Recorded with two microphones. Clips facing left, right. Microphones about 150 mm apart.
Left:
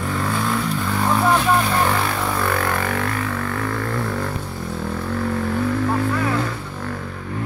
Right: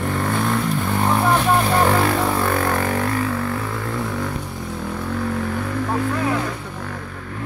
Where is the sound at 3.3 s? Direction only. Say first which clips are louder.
Right 1 dB; 10° right (ahead or behind).